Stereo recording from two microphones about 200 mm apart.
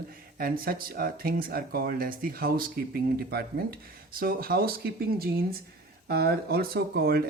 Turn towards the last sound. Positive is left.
turn(degrees=-55)  # may be behind; listen again after turning